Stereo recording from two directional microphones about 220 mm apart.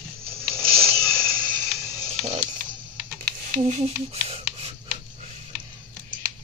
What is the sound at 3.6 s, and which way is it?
Speech, 30° right (ahead or behind).